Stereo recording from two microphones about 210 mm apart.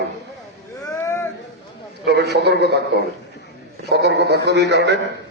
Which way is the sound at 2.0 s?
55° right (ahead or behind).